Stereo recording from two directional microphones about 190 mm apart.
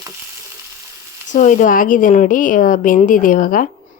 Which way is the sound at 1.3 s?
40° left (ahead or behind).